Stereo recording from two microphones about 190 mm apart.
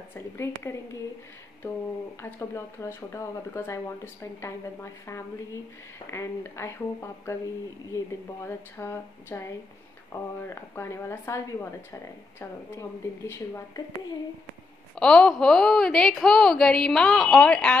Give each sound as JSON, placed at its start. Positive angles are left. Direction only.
{"t": 0.1, "sound": "a woman's voice", "side_deg": 15}
{"t": 2.3, "sound": "a woman's voice", "side_deg": 15}
{"t": 15.0, "sound": "a woman's voice", "side_deg": 5}